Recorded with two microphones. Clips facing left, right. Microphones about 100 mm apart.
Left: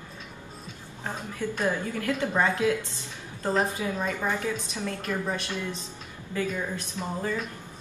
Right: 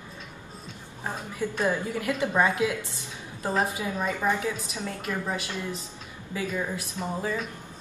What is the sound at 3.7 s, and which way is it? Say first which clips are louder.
A woman's voice: even; 15° right (ahead or behind).